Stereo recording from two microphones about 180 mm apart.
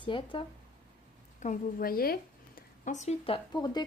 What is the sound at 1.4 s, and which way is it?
Speech, 50° left (ahead or behind).